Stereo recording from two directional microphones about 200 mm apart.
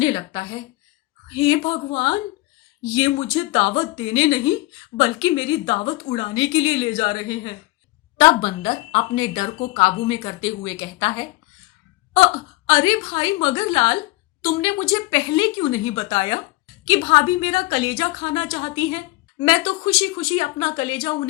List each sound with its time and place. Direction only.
0.0 s a woman's voice: 25° left (ahead or behind)